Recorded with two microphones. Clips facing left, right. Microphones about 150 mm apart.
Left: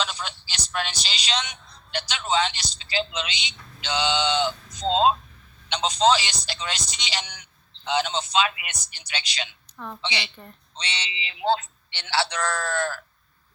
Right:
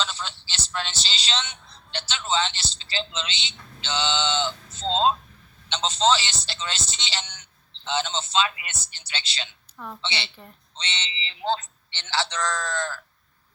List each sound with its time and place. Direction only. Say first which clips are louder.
0.0 s telephone: left 1 dB; 15° left (ahead or behind)
1.3 s speech: left 3 dB; 15° left (ahead or behind)
9.7 s a woman's voice: left 1 dB; 5° right (ahead or behind)
10.0 s speech: left 2 dB; 15° left (ahead or behind)
10.8 s speech: left 1 dB; 25° right (ahead or behind)
11.1 s speech: left 3 dB; 15° left (ahead or behind)
12.4 s speech: left 2 dB; 20° right (ahead or behind)